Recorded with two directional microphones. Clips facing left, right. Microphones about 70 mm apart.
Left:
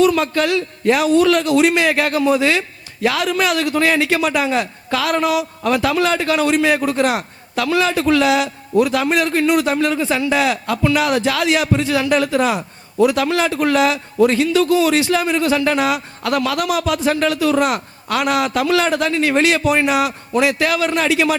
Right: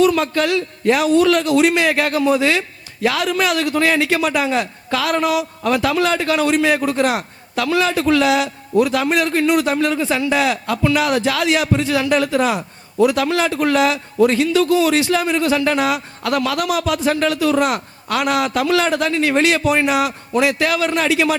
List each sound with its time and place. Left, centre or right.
0.0 s a man's voice: left